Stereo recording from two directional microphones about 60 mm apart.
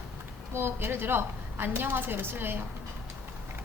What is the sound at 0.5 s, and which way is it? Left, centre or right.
A woman's voice, right.